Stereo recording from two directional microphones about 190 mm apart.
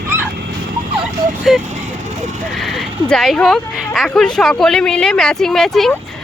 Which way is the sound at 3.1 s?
5° left (ahead or behind).